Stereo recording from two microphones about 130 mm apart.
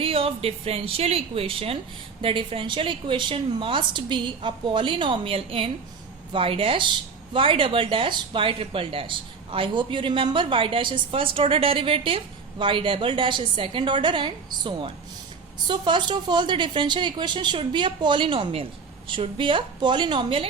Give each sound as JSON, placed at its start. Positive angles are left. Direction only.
{"t": 0.0, "sound": "speech", "side_deg": -45}